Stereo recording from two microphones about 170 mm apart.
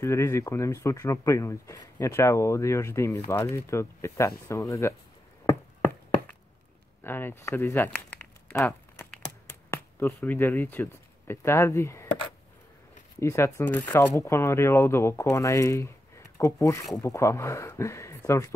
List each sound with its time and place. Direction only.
0.0 s speech: 15° left (ahead or behind)
7.0 s crumpling: 15° left (ahead or behind)
13.2 s speech: 15° left (ahead or behind)